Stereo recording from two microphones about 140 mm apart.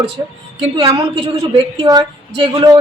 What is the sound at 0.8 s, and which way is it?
Speech, 35° right (ahead or behind).